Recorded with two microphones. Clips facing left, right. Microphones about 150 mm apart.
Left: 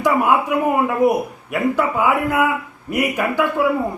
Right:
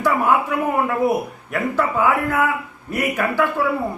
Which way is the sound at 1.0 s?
15° left (ahead or behind).